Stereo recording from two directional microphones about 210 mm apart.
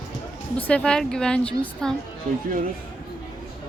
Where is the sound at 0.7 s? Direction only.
5° left (ahead or behind).